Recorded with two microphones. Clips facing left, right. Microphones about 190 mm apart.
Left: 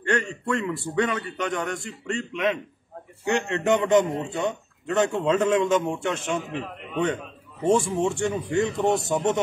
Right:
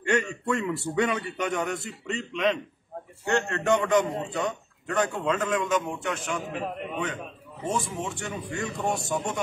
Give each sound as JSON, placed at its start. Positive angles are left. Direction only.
{"t": 0.0, "sound": "a sound", "side_deg": -10}
{"t": 0.5, "sound": "a man's voice", "side_deg": -10}
{"t": 3.3, "sound": "a man's voice", "side_deg": 15}
{"t": 7.6, "sound": "a man's voice", "side_deg": 30}